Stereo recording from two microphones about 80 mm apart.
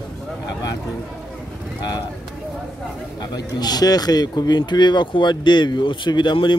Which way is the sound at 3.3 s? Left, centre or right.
Left.